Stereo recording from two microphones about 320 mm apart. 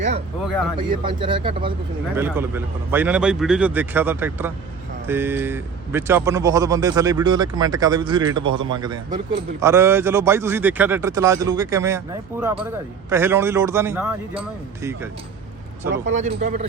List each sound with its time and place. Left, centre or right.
0.9 s a man's voice: centre
15.9 s speech: right